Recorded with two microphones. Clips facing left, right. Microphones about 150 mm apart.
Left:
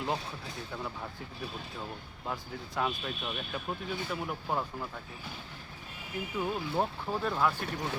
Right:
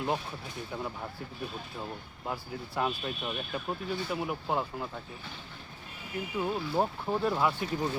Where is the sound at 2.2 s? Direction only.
5° right (ahead or behind).